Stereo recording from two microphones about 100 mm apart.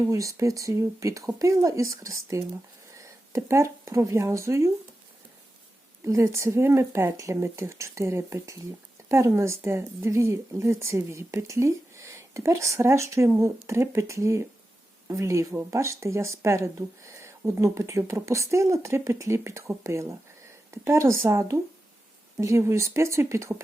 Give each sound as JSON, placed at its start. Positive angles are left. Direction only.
{"t": 0.1, "sound": "speech", "side_deg": -30}
{"t": 6.1, "sound": "speech", "side_deg": -30}